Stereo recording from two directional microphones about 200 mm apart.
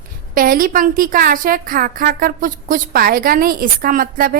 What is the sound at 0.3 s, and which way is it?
A woman's voice, 45° right (ahead or behind).